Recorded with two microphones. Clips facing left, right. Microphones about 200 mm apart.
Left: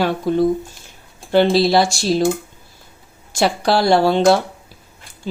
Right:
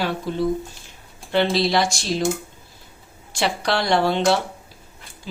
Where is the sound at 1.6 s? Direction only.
35° left (ahead or behind).